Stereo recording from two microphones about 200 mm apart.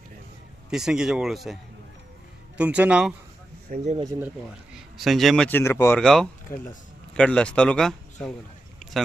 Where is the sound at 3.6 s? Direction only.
35° right (ahead or behind).